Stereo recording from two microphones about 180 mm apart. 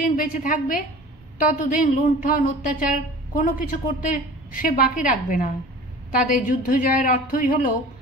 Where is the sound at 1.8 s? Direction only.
45° left (ahead or behind).